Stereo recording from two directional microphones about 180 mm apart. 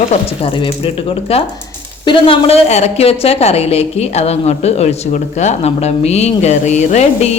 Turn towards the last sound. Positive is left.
turn(degrees=40)  # may be behind; listen again after turning